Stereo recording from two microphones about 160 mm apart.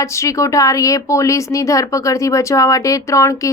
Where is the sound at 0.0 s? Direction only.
20° left (ahead or behind).